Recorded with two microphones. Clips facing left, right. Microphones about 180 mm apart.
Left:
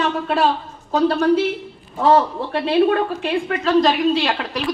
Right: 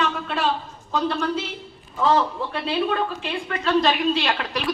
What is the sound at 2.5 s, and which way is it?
Speech, 50° left (ahead or behind).